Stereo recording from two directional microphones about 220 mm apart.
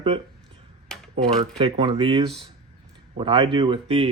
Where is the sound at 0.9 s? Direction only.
5° left (ahead or behind).